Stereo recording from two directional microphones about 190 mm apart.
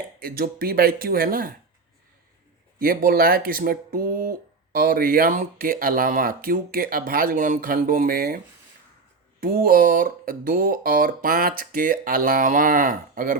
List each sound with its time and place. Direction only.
0.2 s speech: 50° right (ahead or behind)
2.7 s speech: 50° right (ahead or behind)
9.4 s speech: 50° right (ahead or behind)